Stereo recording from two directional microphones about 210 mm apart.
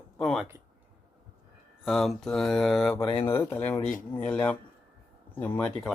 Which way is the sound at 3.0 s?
25° left (ahead or behind).